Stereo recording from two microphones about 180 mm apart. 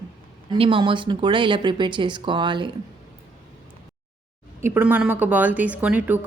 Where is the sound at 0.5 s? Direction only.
30° right (ahead or behind).